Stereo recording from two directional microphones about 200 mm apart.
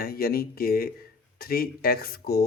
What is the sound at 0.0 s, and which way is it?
Speech, 50° left (ahead or behind).